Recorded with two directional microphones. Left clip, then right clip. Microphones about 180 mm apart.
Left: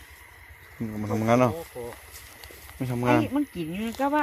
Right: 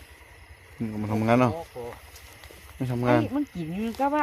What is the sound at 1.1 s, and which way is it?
Speech, 5° right (ahead or behind).